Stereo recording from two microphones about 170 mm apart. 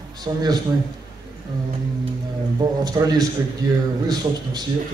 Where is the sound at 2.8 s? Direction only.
25° right (ahead or behind).